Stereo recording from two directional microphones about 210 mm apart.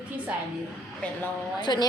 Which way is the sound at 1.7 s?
20° left (ahead or behind).